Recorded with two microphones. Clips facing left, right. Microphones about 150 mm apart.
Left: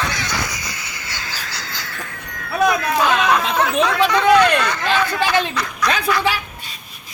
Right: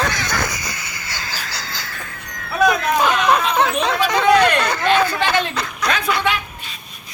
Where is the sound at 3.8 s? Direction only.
30° right (ahead or behind).